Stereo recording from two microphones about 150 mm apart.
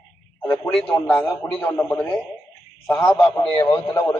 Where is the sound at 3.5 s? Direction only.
20° left (ahead or behind).